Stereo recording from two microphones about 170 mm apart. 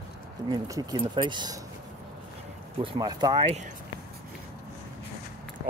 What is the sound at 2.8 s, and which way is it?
Speech, 25° right (ahead or behind).